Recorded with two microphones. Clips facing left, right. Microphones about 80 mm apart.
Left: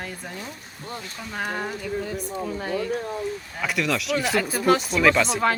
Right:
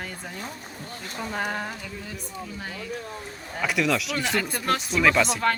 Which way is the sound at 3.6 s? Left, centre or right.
Centre.